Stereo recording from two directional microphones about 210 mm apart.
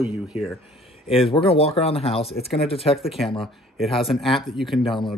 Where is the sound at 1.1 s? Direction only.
25° left (ahead or behind).